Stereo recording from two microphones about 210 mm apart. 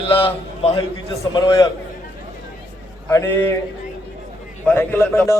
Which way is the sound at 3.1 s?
10° left (ahead or behind).